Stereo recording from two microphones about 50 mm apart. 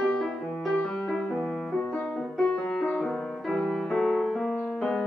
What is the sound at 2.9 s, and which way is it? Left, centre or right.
Music, centre.